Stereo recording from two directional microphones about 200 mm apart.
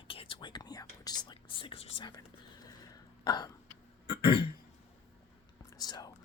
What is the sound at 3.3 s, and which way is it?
Burping, 20° left (ahead or behind).